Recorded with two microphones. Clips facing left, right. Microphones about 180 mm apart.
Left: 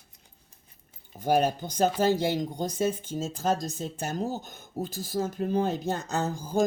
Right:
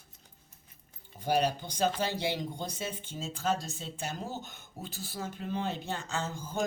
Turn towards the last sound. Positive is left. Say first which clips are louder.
# left 7 dB
turn(degrees=35)  # may be behind; listen again after turning